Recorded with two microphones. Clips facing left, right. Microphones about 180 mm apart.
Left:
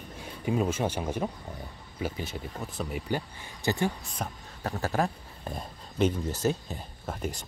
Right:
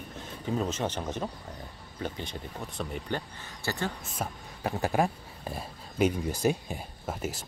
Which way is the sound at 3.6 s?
15° left (ahead or behind).